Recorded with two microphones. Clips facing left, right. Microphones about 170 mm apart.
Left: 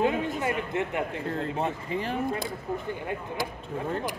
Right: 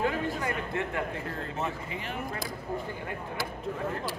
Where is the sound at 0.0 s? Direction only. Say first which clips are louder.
Left 4 dB; 20° left (ahead or behind).